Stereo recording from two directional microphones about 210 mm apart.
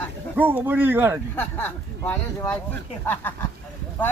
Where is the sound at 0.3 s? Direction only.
10° right (ahead or behind).